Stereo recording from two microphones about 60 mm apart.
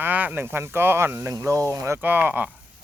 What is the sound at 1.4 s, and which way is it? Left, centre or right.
Speech, right.